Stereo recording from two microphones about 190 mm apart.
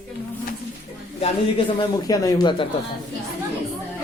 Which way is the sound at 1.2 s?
20° left (ahead or behind).